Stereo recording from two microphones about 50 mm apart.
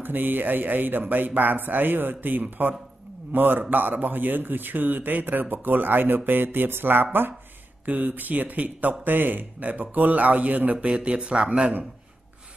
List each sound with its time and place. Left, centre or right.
0.0 s speech: right; by 11.7 s centre